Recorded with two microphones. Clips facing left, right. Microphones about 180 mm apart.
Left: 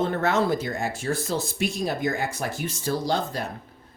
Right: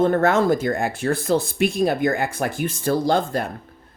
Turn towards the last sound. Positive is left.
turn(degrees=-55)  # may be behind; listen again after turning